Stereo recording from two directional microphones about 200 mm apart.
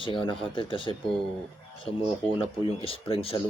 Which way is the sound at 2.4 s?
25° left (ahead or behind).